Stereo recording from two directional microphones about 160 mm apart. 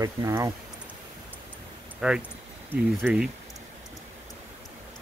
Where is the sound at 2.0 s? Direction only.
5° right (ahead or behind).